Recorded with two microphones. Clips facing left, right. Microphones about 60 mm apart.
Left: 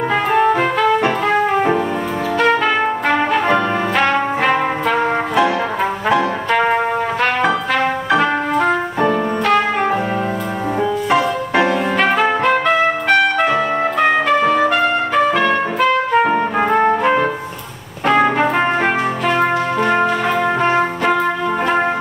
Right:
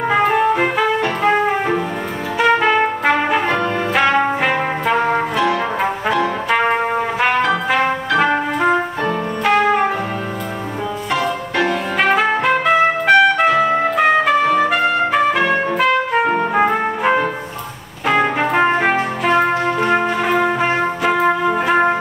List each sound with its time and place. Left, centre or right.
0.1 s music: centre
2.4 s trumpet: centre
3.4 s brass instrument: centre
6.5 s music: centre
8.2 s music: centre
11.1 s music: centre
12.0 s trumpet: centre
18.0 s music: centre